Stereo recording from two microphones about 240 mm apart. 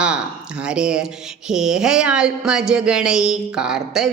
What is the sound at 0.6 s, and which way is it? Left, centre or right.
A woman's voice, centre.